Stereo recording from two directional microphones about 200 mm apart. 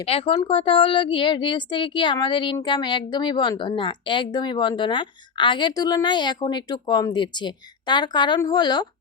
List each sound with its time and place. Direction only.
0.0 s a woman's voice: 30° left (ahead or behind)